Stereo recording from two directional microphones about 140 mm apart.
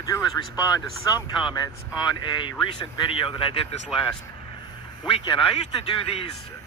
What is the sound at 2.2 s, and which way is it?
Speech, 35° left (ahead or behind).